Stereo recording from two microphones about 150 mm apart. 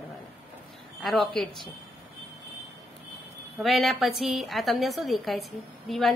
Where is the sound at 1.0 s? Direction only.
Centre (ahead or behind).